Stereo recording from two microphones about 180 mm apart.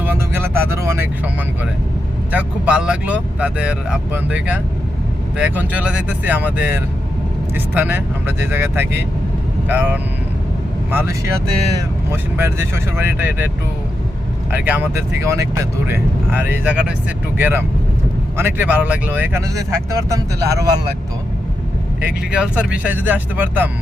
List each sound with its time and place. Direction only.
0.0 s vehicle: 10° right (ahead or behind)
2.3 s speech: 5° right (ahead or behind)
14.5 s speech: 10° right (ahead or behind)
22.0 s speech: 5° right (ahead or behind)